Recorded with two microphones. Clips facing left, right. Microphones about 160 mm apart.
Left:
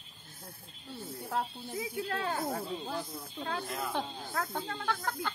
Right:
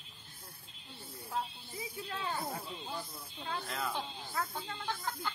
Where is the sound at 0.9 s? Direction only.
45° left (ahead or behind).